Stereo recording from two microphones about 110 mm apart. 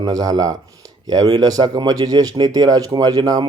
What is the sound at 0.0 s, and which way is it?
Speech, 35° right (ahead or behind).